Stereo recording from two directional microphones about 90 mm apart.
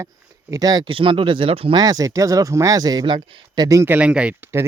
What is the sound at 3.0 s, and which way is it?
Speech, 55° right (ahead or behind).